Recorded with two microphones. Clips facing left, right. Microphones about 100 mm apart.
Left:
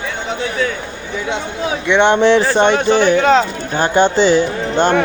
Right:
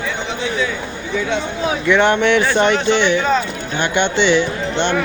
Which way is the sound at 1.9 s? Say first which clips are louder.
Left 3 dB; 25° left (ahead or behind).